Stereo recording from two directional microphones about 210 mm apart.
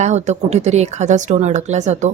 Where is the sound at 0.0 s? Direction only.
35° right (ahead or behind).